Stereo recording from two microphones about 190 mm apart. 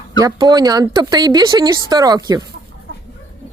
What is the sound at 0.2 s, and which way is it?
Speech, 20° right (ahead or behind).